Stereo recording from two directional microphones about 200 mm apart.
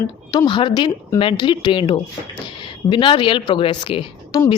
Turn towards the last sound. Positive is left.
turn(degrees=20)  # may be behind; listen again after turning